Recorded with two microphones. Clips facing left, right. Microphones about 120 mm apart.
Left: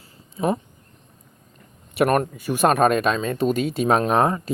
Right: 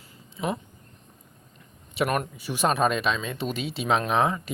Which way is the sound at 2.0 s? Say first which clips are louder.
Left 7 dB; 50° left (ahead or behind).